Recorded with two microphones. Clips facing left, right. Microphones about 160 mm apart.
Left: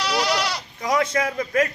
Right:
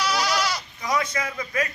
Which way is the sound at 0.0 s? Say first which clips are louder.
Left 2 dB; 30° left (ahead or behind).